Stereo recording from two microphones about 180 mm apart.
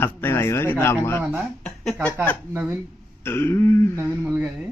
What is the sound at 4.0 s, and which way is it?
Speech, 10° right (ahead or behind).